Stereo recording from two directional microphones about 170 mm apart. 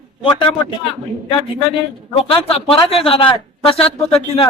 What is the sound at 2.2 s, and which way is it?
A man's voice, 30° left (ahead or behind).